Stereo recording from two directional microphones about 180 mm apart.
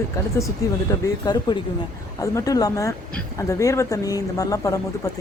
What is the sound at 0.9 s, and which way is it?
Speech, 20° left (ahead or behind).